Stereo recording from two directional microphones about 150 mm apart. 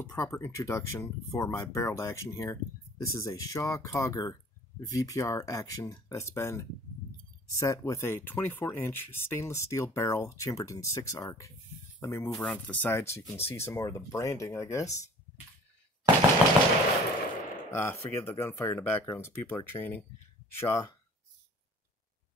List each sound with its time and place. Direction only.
0.0 s speech: 20° left (ahead or behind)
16.4 s machine gun: 10° right (ahead or behind)
17.7 s speech: 15° left (ahead or behind)